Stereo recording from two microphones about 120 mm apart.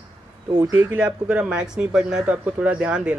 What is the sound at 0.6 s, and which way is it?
Speech, 20° right (ahead or behind).